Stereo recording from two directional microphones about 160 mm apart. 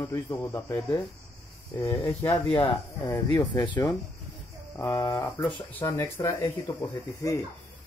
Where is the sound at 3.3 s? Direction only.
30° left (ahead or behind).